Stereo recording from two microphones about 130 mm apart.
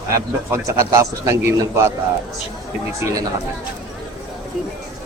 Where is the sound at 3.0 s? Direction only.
25° right (ahead or behind).